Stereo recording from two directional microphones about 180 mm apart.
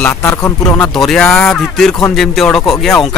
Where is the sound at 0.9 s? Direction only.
Centre (ahead or behind).